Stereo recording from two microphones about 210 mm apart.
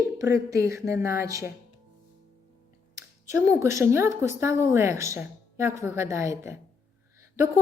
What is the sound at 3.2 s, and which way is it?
A woman's voice, 15° right (ahead or behind).